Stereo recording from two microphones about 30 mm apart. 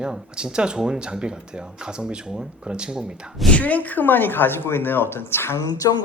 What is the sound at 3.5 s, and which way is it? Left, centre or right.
Speech, left.